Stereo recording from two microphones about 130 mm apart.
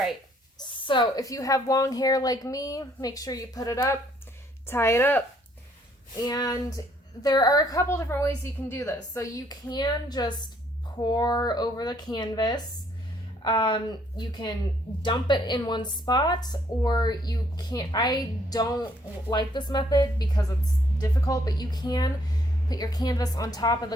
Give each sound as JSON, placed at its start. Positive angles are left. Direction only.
{"t": 0.6, "sound": "a woman's voice", "side_deg": 40}
{"t": 6.2, "sound": "a woman's voice", "side_deg": 30}